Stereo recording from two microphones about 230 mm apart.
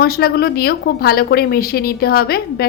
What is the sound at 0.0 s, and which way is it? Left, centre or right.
Speech, left.